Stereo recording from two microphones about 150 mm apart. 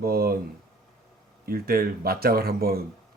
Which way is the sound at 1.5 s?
90° right.